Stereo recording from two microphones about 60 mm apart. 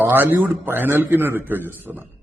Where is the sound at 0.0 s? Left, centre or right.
Right.